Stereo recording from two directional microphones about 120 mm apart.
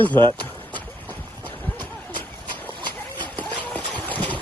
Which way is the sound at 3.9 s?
15° left (ahead or behind).